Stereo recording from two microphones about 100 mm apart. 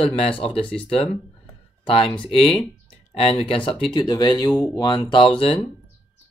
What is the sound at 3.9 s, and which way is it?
Speech, 45° left (ahead or behind).